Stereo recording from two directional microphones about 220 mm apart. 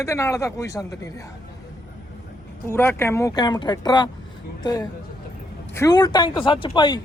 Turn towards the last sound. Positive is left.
turn(degrees=20)  # may be behind; listen again after turning